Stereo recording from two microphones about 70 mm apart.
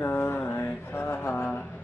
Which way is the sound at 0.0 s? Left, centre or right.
Left.